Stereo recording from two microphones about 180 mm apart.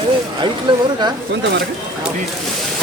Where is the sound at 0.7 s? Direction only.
25° right (ahead or behind).